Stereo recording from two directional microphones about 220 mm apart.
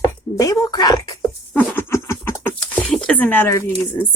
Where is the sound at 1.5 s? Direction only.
10° left (ahead or behind).